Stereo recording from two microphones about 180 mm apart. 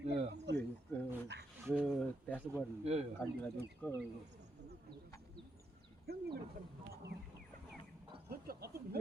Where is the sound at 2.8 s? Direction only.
35° right (ahead or behind).